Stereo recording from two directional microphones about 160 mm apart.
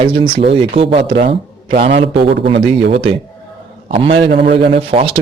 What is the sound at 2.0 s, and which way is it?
Speech, 90° right.